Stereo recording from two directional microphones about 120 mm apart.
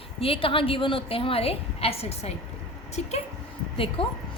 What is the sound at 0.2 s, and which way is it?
A woman's voice, 50° left (ahead or behind).